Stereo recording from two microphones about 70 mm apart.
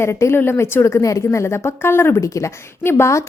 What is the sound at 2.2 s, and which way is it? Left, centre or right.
Speech, left.